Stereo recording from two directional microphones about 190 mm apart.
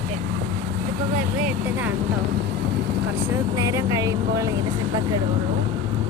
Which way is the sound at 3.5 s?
15° right (ahead or behind).